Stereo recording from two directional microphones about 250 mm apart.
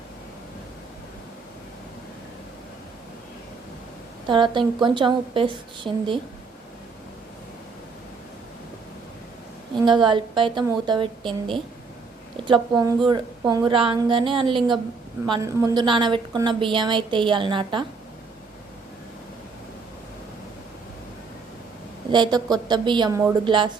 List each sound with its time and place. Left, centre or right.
4.3 s a woman's voice: centre
9.8 s a woman's voice: centre
11.2 s a woman's voice: centre
12.7 s a woman's voice: centre
22.1 s a woman's voice: centre